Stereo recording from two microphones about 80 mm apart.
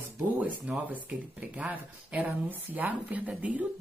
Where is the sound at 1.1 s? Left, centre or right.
Centre.